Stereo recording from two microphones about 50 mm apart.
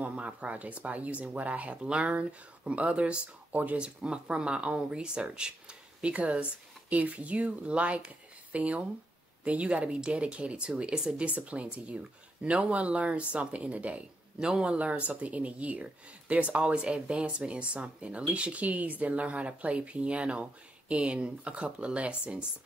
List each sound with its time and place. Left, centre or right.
0.0 s speech: right
3.8 s speech: centre